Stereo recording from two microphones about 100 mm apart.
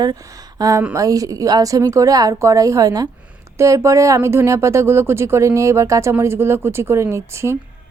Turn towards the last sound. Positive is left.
turn(degrees=-30)  # may be behind; listen again after turning